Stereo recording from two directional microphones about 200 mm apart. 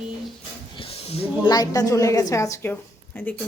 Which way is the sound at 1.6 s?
15° left (ahead or behind).